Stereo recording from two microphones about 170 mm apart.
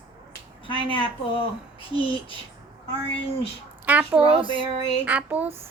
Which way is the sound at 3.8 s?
10° right (ahead or behind).